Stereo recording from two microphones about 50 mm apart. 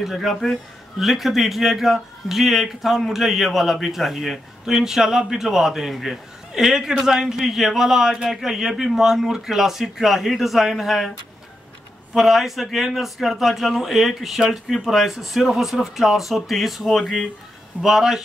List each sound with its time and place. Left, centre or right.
0.0 s a man's voice: centre
17.8 s a man's voice: centre